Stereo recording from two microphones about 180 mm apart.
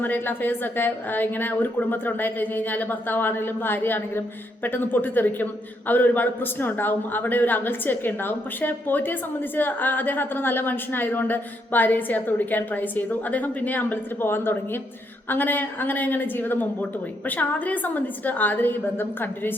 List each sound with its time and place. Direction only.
0.0 s a woman's voice: 10° left (ahead or behind)